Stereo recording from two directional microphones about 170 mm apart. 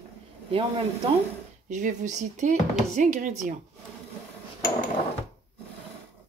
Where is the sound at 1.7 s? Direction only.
45° right (ahead or behind).